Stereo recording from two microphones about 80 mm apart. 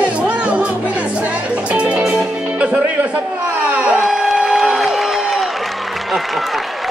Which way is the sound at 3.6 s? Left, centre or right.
Centre.